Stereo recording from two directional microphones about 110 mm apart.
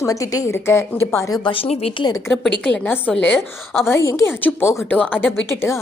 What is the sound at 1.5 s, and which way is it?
Speech, 60° left (ahead or behind).